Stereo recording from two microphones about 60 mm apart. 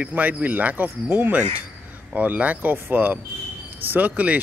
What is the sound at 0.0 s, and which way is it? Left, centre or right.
Speech, right.